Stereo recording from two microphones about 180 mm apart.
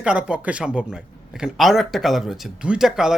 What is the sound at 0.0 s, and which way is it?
Speech, 5° right (ahead or behind).